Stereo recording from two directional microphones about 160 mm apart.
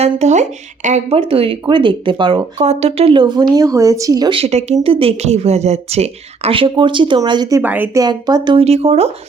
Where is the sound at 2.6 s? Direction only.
45° right (ahead or behind); by 4.4 s 25° right (ahead or behind).